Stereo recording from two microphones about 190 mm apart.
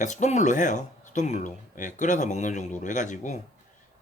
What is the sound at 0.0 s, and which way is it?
A man's voice, 40° left (ahead or behind).